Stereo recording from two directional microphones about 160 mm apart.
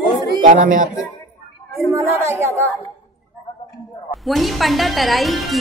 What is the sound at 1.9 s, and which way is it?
Speech, 15° right (ahead or behind).